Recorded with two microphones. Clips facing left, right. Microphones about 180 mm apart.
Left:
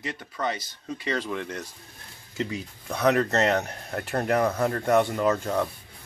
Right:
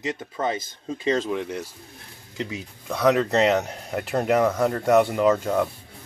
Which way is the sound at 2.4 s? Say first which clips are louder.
Left 1 dB; centre (ahead or behind).